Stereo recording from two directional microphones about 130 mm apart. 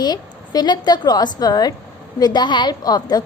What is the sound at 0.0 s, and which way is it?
A woman's voice, 30° left (ahead or behind).